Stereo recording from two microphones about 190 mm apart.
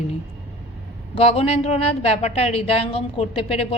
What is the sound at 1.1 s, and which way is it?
A woman's voice, 30° left (ahead or behind).